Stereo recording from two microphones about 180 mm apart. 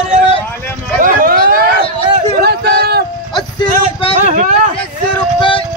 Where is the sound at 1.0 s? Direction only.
55° right (ahead or behind).